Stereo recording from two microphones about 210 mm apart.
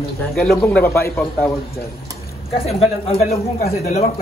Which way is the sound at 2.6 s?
30° left (ahead or behind).